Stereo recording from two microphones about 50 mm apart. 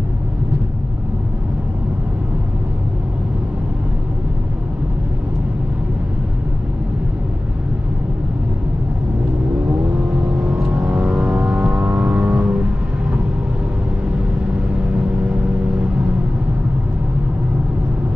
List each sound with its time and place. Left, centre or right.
10.0 s vehicle: right
14.9 s vehicle: right